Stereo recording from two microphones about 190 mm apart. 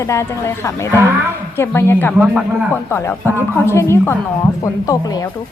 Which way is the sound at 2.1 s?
5° right (ahead or behind).